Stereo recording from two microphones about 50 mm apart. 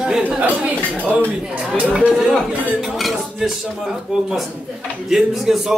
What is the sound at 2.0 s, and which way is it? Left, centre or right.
Speech, centre.